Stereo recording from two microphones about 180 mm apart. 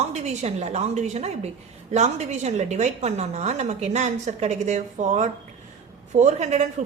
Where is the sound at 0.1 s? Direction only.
35° right (ahead or behind).